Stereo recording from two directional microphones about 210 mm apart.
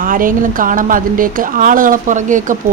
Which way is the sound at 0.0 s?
40° right (ahead or behind).